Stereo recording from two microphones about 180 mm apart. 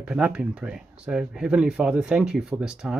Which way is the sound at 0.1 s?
5° right (ahead or behind).